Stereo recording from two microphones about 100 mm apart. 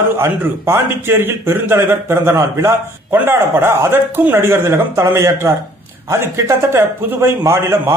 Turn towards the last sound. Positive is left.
turn(degrees=-25)  # may be behind; listen again after turning